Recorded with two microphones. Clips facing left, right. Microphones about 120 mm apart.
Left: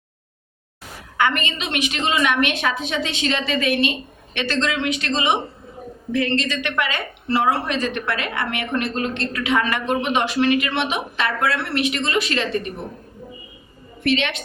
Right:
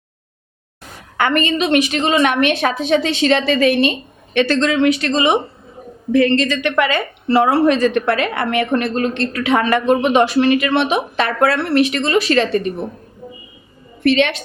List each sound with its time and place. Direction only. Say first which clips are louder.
1.1 s a woman's voice: right 5 dB; 45° right (ahead or behind)
14.0 s a woman's voice: right 7 dB; 40° right (ahead or behind)